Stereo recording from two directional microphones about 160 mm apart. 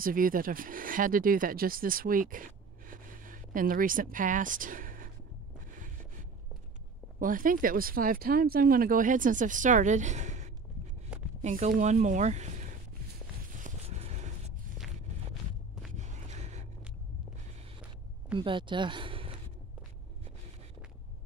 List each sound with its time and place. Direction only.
0.0 s speech: 60° right (ahead or behind)
7.2 s speech: 60° right (ahead or behind)
11.1 s a sound: 5° right (ahead or behind)
11.4 s speech: 55° right (ahead or behind)
13.5 s vehicle: 50° right (ahead or behind)
16.0 s a sound: 45° right (ahead or behind)
18.4 s speech: 30° right (ahead or behind)